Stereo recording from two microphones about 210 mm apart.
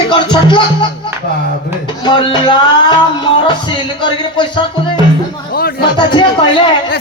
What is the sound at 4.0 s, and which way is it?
Music, 25° left (ahead or behind).